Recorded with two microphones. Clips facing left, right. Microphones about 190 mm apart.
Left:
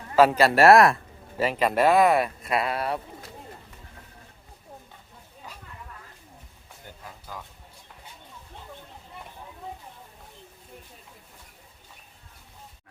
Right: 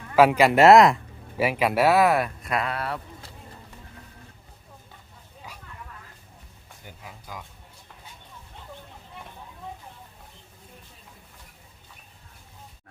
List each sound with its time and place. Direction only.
0.2 s speech: 15° right (ahead or behind); by 3.0 s 15° left (ahead or behind)
6.8 s music: 10° right (ahead or behind)